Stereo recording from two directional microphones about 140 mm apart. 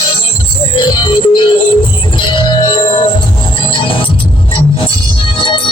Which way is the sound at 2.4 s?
35° left (ahead or behind).